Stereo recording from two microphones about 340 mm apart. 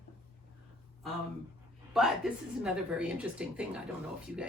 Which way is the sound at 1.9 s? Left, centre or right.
Centre.